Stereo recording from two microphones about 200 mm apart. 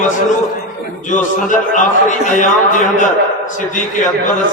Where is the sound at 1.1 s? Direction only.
40° left (ahead or behind).